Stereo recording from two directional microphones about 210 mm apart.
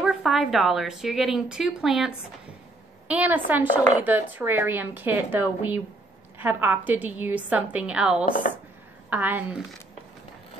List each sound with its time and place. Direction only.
0.0 s a woman's voice: centre (ahead or behind)
8.3 s speech: 40° left (ahead or behind)
9.1 s a woman's voice: 10° right (ahead or behind)